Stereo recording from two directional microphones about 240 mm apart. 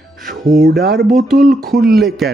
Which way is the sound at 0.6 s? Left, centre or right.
Right.